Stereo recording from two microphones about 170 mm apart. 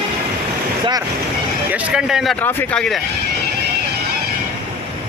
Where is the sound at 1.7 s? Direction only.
5° right (ahead or behind).